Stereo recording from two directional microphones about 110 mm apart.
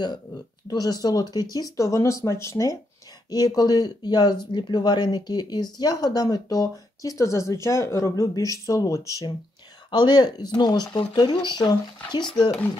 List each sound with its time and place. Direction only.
0.7 s speech: 35° left (ahead or behind)
9.8 s speech: 45° left (ahead or behind)